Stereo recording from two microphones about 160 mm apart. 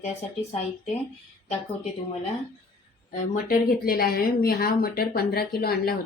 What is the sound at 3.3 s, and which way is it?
Speech, 65° left (ahead or behind).